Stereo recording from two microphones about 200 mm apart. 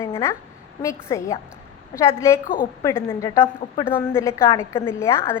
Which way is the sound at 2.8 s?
15° left (ahead or behind).